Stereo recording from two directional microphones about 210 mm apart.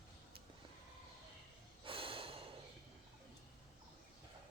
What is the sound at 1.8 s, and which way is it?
Snort, 25° right (ahead or behind).